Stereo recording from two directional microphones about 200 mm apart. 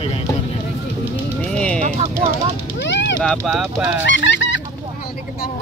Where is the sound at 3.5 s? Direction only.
5° right (ahead or behind).